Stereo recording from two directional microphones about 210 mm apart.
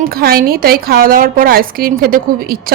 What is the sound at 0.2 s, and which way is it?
Speech, 45° right (ahead or behind).